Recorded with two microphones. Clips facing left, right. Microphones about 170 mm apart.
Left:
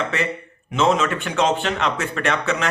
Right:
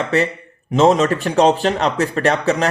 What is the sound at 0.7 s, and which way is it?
Speech, 35° right (ahead or behind).